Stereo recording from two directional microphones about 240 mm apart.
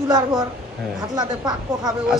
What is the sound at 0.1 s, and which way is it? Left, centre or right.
Speech, centre.